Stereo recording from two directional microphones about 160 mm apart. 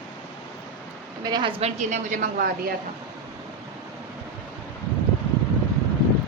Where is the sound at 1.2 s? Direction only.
25° right (ahead or behind).